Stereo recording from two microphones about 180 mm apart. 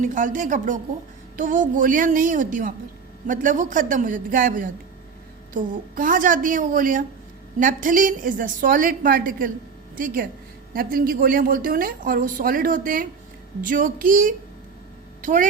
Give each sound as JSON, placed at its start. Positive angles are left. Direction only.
{"t": 0.0, "sound": "a woman's voice", "side_deg": -45}